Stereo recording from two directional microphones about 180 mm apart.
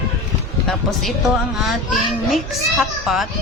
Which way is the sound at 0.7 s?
Centre (ahead or behind).